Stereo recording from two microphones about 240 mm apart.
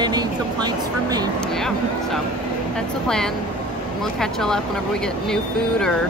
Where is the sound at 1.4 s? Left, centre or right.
Centre.